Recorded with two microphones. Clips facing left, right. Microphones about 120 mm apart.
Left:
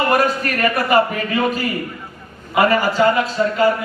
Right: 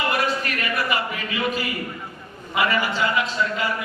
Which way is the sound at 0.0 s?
45° left (ahead or behind).